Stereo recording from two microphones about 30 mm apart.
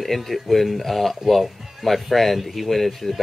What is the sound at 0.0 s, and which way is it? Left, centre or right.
Speech, centre.